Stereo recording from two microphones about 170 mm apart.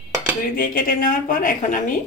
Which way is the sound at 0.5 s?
55° left (ahead or behind).